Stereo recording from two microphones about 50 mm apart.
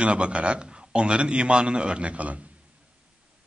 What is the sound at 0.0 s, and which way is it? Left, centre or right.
A man's voice, right.